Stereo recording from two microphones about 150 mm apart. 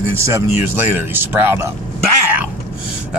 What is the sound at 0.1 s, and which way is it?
Speech, 15° right (ahead or behind).